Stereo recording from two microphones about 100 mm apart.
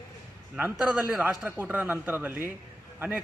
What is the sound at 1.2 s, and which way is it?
A man's voice, 15° right (ahead or behind).